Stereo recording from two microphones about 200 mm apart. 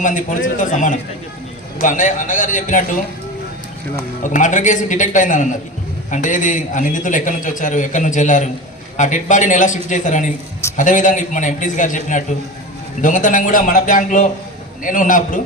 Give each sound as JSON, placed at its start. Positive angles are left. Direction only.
{"t": 0.0, "sound": "a man's voice", "side_deg": 40}
{"t": 4.2, "sound": "a man's voice", "side_deg": 40}